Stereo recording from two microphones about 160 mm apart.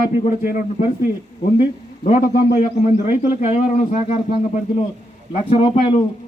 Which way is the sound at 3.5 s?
45° left (ahead or behind).